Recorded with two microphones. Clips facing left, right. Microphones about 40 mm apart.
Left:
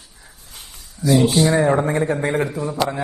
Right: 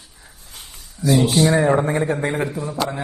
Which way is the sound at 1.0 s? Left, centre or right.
Centre.